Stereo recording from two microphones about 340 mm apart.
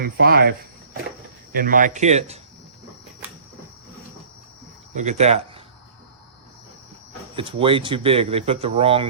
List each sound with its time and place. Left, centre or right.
0.0 s speech: right
1.5 s speech: right
4.9 s speech: centre
7.3 s speech: centre